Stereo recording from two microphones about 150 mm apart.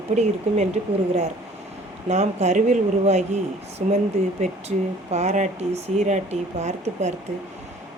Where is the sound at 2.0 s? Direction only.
50° right (ahead or behind).